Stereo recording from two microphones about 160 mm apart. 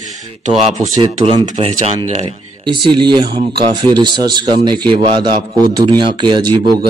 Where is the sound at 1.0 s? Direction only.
35° right (ahead or behind).